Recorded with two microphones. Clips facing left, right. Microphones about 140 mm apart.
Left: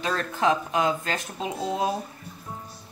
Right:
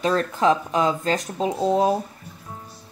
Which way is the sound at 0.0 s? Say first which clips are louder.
Right 5 dB; 40° right (ahead or behind).